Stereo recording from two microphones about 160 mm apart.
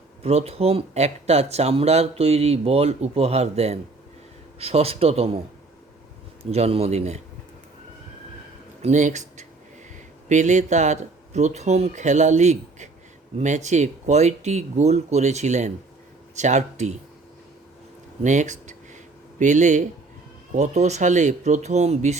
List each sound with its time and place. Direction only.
0.2 s speech: 40° right (ahead or behind)
6.4 s speech: 40° right (ahead or behind)
8.8 s speech: 50° right (ahead or behind)
18.2 s speech: 50° right (ahead or behind)